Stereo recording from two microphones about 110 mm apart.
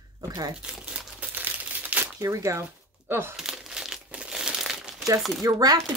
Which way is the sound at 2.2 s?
30° right (ahead or behind).